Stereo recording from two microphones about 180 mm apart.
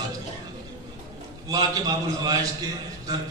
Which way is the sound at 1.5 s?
20° right (ahead or behind).